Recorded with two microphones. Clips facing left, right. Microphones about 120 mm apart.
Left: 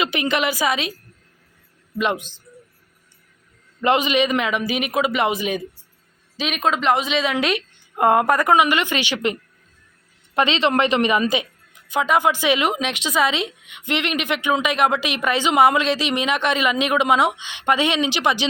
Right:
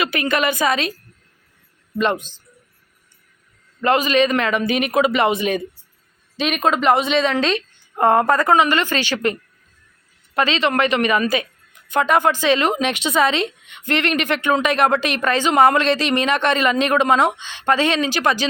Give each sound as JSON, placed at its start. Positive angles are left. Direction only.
{"t": 0.0, "sound": "speech", "side_deg": 15}
{"t": 2.0, "sound": "speech", "side_deg": 10}
{"t": 3.8, "sound": "a man's voice", "side_deg": 20}
{"t": 11.9, "sound": "speech", "side_deg": 10}